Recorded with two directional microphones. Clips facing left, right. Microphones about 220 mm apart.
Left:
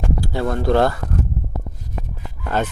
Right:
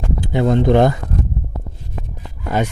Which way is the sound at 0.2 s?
20° right (ahead or behind).